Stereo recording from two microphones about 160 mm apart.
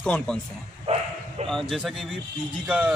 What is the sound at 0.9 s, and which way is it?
Bow-wow, 40° right (ahead or behind).